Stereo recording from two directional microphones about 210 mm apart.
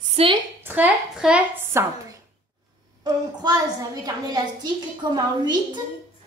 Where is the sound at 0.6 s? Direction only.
10° right (ahead or behind).